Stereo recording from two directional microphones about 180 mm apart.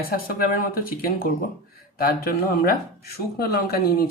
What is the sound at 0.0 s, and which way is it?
Speech, 55° left (ahead or behind).